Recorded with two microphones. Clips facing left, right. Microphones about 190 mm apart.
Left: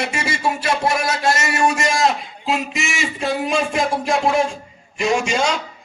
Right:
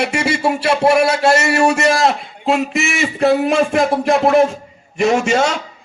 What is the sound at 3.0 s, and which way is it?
A man's voice, 60° right (ahead or behind).